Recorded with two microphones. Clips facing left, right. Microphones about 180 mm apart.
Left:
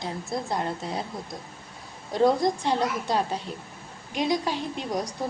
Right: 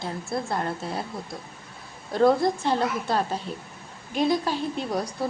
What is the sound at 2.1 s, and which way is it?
A woman's voice, 15° left (ahead or behind).